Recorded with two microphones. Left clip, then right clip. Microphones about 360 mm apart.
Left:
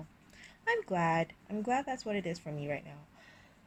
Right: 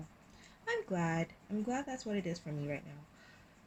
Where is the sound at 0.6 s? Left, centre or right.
Left.